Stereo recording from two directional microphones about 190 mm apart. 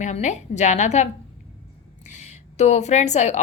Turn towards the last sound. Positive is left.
turn(degrees=35)  # may be behind; listen again after turning